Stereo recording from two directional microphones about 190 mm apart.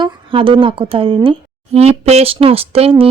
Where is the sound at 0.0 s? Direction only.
25° right (ahead or behind).